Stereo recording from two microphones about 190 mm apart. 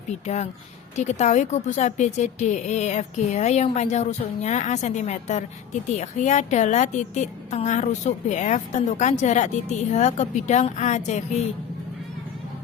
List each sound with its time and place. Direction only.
0.9 s a woman's voice: 40° left (ahead or behind)